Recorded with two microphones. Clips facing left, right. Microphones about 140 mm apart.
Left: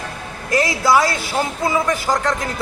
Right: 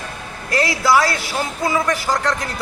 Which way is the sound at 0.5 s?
20° left (ahead or behind).